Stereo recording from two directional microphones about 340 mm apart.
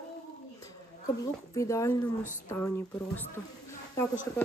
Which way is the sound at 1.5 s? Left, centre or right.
Centre.